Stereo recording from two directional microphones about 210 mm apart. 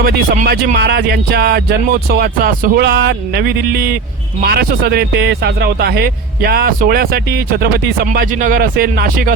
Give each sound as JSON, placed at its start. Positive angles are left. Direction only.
{"t": 0.0, "sound": "a man's voice", "side_deg": -45}